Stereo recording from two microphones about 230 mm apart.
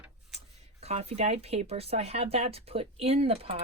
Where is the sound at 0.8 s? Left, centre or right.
Right.